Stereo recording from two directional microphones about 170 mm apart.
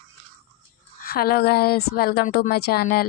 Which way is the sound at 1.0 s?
65° left (ahead or behind).